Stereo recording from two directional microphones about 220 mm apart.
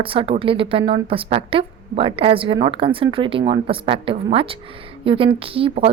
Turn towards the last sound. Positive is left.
turn(degrees=-25)  # may be behind; listen again after turning